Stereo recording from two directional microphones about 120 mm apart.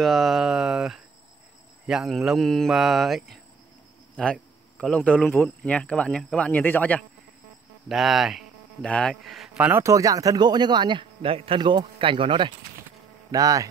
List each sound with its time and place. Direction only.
0.0 s speech: centre (ahead or behind)
7.9 s speech: centre (ahead or behind)
9.6 s speech: 20° right (ahead or behind); by 12.5 s 45° right (ahead or behind)
13.3 s speech: 30° right (ahead or behind)